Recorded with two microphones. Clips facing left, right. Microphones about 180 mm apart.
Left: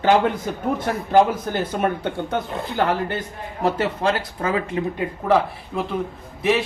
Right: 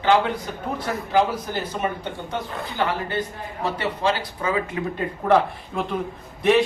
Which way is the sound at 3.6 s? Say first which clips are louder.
Left 4 dB; 45° left (ahead or behind).